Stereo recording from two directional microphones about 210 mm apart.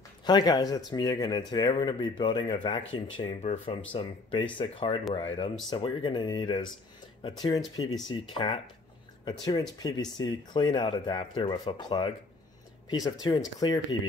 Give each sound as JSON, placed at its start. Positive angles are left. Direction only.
{"t": 0.2, "sound": "speech", "side_deg": 20}